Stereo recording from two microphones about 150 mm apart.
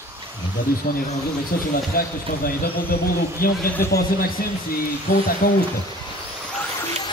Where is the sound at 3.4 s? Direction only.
75° left (ahead or behind).